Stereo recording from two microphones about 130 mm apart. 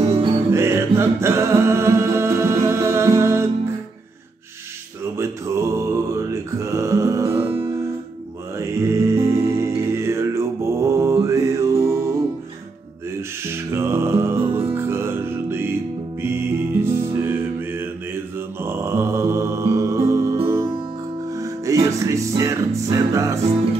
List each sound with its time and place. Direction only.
0.5 s music: 20° right (ahead or behind)
5.1 s mantra: 20° right (ahead or behind)
8.5 s music: 20° right (ahead or behind)
9.9 s mantra: 20° right (ahead or behind)
13.4 s music: 20° right (ahead or behind)